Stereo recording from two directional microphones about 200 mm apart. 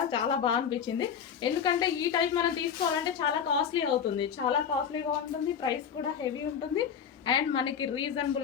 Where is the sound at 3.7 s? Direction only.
25° left (ahead or behind).